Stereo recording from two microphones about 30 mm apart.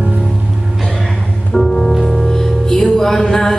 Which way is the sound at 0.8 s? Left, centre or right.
Centre.